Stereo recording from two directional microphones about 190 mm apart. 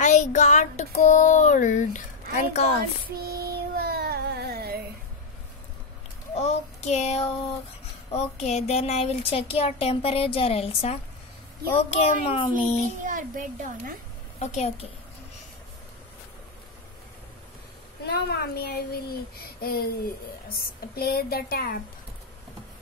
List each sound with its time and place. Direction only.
0.0 s a sound: 40° left (ahead or behind)
3.3 s music: 55° right (ahead or behind)
6.3 s child singing: 35° left (ahead or behind)
8.1 s speech: 35° left (ahead or behind)
13.0 s a child's voice: 45° right (ahead or behind)
14.4 s speech: 35° left (ahead or behind)
18.0 s a child's voice: 55° left (ahead or behind)